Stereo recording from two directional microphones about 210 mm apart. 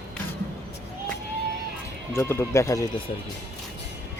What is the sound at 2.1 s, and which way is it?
Speech, 10° left (ahead or behind).